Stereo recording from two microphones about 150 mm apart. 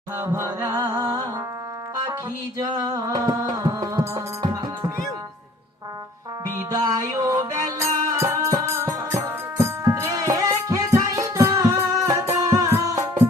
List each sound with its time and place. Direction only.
0.2 s music: 20° right (ahead or behind)
2.6 s music: 25° right (ahead or behind)
6.7 s music: 25° right (ahead or behind)